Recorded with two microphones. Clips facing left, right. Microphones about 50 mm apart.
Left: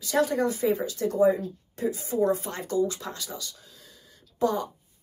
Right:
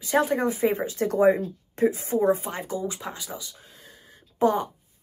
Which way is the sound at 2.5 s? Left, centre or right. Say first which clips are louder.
Left 3 dB; centre.